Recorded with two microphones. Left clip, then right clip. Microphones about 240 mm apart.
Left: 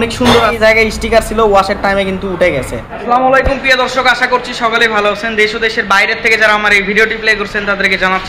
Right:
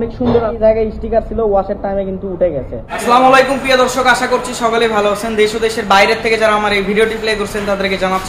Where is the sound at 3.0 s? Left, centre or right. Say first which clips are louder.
Right 1 dB; centre.